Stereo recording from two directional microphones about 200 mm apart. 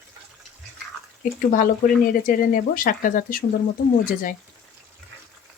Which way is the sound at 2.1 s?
45° left (ahead or behind).